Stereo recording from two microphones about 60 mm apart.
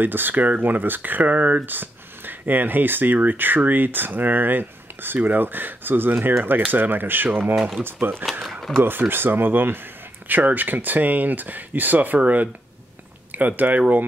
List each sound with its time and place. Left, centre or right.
0.0 s speech: right
8.3 s speech: centre
8.7 s speech: right